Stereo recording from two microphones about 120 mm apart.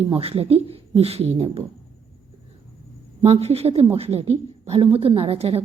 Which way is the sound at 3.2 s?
60° right (ahead or behind).